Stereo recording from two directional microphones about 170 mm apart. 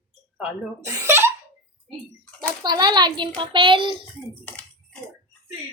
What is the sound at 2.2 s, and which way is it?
Bathtub, 5° left (ahead or behind).